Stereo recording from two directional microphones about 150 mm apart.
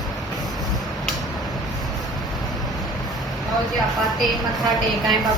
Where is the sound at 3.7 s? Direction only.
Centre (ahead or behind).